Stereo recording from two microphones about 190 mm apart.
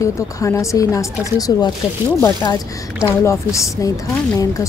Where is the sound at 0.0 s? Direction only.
15° left (ahead or behind).